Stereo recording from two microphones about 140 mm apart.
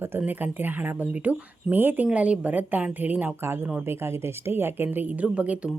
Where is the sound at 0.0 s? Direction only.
15° right (ahead or behind).